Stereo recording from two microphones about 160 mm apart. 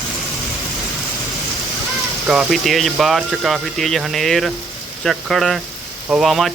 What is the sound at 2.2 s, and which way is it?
Speech, 5° right (ahead or behind).